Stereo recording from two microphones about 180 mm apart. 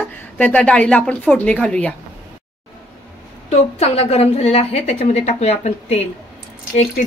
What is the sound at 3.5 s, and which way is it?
A woman's voice, 35° left (ahead or behind).